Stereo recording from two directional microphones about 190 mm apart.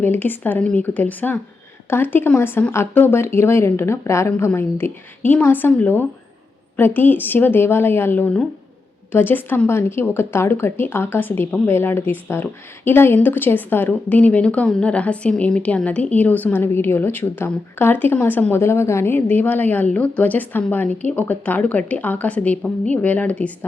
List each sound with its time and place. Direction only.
0.0 s a woman's voice: 10° left (ahead or behind)